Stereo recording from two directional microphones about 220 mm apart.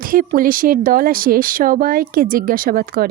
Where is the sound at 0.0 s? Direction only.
40° right (ahead or behind).